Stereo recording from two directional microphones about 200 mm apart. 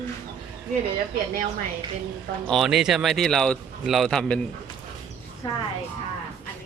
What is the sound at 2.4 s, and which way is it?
Speech, centre (ahead or behind).